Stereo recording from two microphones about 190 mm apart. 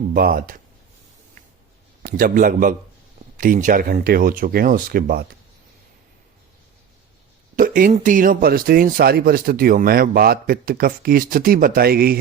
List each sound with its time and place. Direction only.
0.1 s speech: 50° right (ahead or behind)
2.0 s speech: 45° right (ahead or behind)
7.5 s speech: 45° right (ahead or behind)